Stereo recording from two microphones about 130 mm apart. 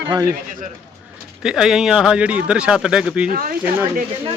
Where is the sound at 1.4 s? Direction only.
5° right (ahead or behind).